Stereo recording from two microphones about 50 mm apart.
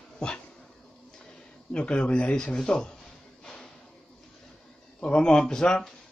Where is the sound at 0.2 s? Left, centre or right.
Centre.